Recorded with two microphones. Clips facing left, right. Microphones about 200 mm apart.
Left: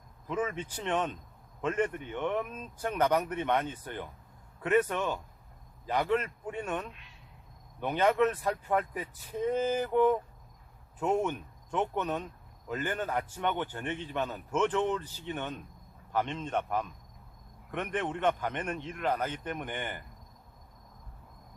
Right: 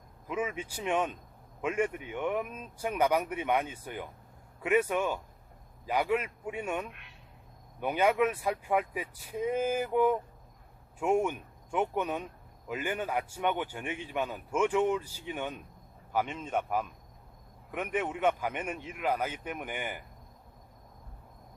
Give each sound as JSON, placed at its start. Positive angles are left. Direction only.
{"t": 0.3, "sound": "a man's voice", "side_deg": -10}
{"t": 6.9, "sound": "a sound", "side_deg": -60}
{"t": 7.8, "sound": "a man's voice", "side_deg": -10}